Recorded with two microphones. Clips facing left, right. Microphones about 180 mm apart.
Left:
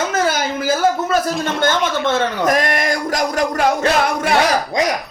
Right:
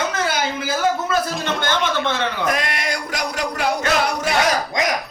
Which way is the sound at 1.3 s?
Centre (ahead or behind).